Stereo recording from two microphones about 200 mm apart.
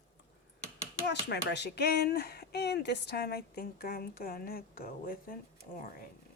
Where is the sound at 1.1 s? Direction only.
60° left (ahead or behind).